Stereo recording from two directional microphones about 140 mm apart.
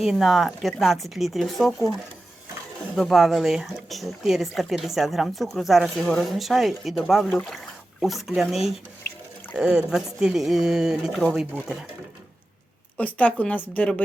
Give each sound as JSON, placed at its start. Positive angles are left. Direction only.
{"t": 0.0, "sound": "speech", "side_deg": 0}
{"t": 13.0, "sound": "speech", "side_deg": 10}